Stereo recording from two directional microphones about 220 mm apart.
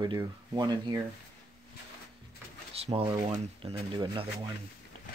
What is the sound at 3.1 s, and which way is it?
Speech, 25° right (ahead or behind).